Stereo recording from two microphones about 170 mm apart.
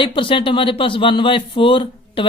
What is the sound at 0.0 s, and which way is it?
Speech, 30° left (ahead or behind).